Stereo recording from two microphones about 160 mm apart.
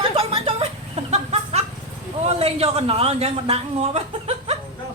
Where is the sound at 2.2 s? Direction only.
40° right (ahead or behind).